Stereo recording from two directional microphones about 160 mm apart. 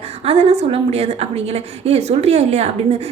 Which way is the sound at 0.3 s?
40° right (ahead or behind).